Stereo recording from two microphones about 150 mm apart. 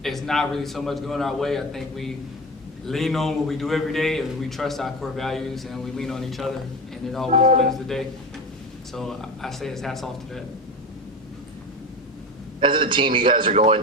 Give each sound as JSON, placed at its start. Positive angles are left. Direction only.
{"t": 0.0, "sound": "a man's voice", "side_deg": 0}
{"t": 7.3, "sound": "speech", "side_deg": -45}
{"t": 8.9, "sound": "a man's voice", "side_deg": 5}
{"t": 12.5, "sound": "a man's voice", "side_deg": -35}